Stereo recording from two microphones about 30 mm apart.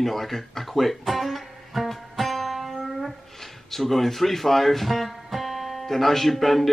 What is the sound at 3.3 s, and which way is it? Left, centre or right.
Speech, centre.